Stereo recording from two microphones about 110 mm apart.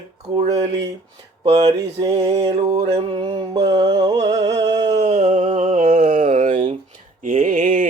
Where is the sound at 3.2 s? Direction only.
45° right (ahead or behind).